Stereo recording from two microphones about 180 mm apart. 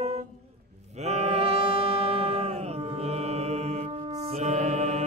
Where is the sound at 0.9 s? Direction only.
35° right (ahead or behind).